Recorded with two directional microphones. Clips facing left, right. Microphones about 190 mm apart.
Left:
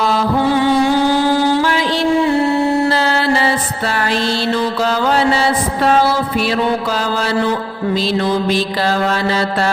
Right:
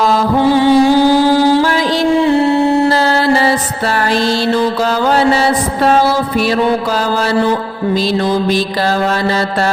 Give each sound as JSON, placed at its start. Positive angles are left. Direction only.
{"t": 0.3, "sound": "music", "side_deg": -30}
{"t": 2.2, "sound": "music", "side_deg": -25}
{"t": 2.9, "sound": "mantra", "side_deg": -40}
{"t": 7.9, "sound": "mantra", "side_deg": -40}